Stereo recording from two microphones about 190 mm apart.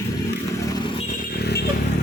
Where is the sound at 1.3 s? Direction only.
55° left (ahead or behind).